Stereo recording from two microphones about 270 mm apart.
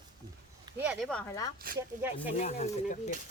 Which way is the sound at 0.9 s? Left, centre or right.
Centre.